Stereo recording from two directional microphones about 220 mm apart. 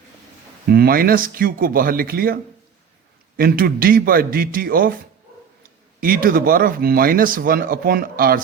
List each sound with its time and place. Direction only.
0.7 s speech: 45° right (ahead or behind)
6.0 s speech: 40° right (ahead or behind)